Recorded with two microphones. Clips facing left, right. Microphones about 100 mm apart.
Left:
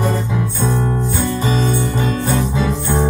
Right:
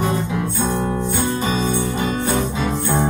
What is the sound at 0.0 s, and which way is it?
Music, 55° left (ahead or behind).